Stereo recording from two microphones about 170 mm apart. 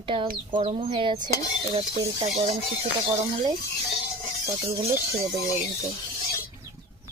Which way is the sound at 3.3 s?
20° right (ahead or behind).